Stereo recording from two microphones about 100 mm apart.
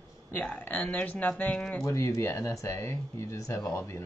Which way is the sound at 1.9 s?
30° left (ahead or behind).